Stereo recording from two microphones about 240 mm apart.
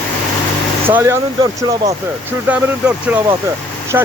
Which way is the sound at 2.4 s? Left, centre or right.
Centre.